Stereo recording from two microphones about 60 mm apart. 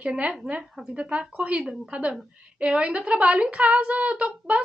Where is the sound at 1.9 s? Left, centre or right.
Centre.